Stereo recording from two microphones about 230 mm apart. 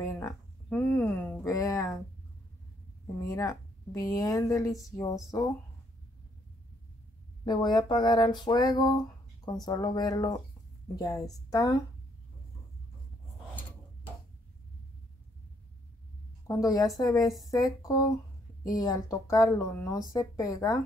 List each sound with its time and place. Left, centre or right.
0.0 s speech: centre
3.2 s speech: centre
7.4 s speech: centre
16.6 s speech: centre